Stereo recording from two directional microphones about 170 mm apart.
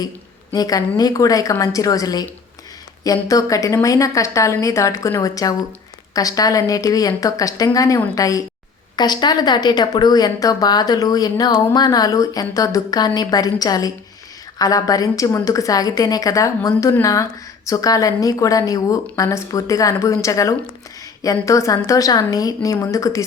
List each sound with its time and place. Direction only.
0.5 s speech: 20° left (ahead or behind)